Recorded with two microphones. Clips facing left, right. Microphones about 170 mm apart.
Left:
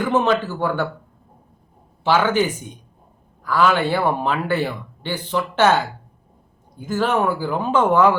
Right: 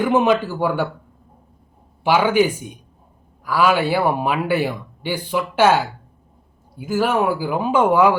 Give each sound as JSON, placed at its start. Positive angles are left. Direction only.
{"t": 0.0, "sound": "speech", "side_deg": -10}
{"t": 2.0, "sound": "speech", "side_deg": -10}